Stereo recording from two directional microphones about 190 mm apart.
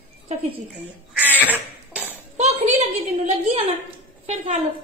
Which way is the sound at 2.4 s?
35° right (ahead or behind).